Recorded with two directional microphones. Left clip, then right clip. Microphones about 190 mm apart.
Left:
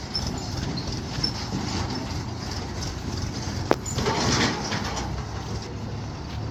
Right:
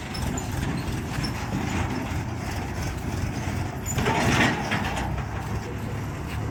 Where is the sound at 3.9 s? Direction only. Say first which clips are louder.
Right 1 dB; 20° right (ahead or behind).